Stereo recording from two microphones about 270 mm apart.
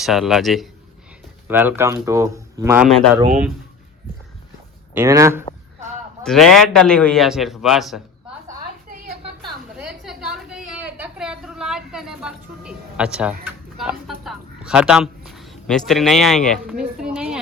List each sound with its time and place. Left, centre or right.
0.0 s a man's voice: centre
4.9 s speech: centre
6.2 s a man's voice: centre
9.7 s a sound: centre